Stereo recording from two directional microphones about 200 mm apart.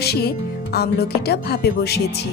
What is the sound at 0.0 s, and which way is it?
Speech, 55° left (ahead or behind).